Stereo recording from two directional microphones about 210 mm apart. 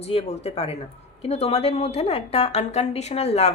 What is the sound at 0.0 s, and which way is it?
Speech, 30° left (ahead or behind).